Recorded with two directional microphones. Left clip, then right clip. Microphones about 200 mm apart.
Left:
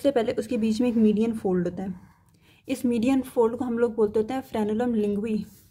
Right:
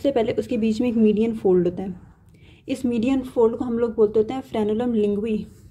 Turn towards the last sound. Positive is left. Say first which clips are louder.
# right 5 dB
turn(degrees=15)  # may be behind; listen again after turning